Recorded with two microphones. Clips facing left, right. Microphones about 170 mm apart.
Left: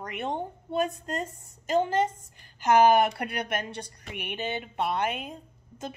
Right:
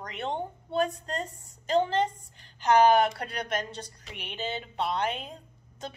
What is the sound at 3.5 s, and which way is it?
Music, 55° left (ahead or behind).